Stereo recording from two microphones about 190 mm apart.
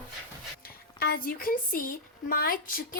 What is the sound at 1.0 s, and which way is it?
A woman's voice, 55° left (ahead or behind).